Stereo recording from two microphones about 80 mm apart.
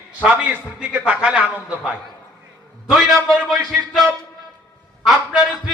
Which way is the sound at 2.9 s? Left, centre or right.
Centre.